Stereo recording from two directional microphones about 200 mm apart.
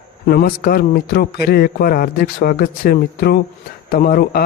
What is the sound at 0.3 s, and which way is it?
A man's voice, 50° left (ahead or behind).